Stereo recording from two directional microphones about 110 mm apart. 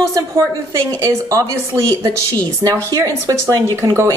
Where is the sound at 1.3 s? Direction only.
30° right (ahead or behind).